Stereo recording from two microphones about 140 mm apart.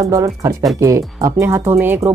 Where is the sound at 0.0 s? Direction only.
25° right (ahead or behind).